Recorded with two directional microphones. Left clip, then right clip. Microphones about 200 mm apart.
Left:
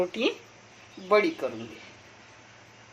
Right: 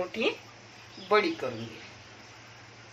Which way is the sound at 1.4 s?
50° left (ahead or behind).